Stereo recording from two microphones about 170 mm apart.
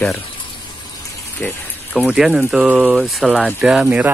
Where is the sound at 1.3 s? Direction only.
10° left (ahead or behind).